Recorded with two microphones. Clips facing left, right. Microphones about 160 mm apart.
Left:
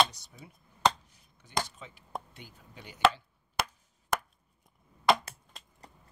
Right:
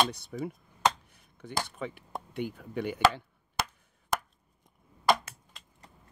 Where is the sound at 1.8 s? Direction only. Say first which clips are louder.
Right 5 dB; 65° right (ahead or behind).